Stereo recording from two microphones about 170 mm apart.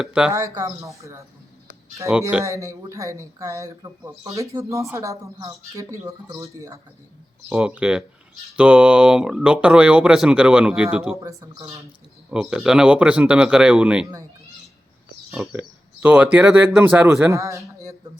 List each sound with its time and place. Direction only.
0.0 s speech: 5° right (ahead or behind)
0.3 s speech: 20° right (ahead or behind)
2.4 s speech: 20° right (ahead or behind)
7.5 s speech: 5° right (ahead or behind)
11.2 s speech: 20° right (ahead or behind)
12.3 s speech: 5° right (ahead or behind)
15.5 s speech: 10° right (ahead or behind)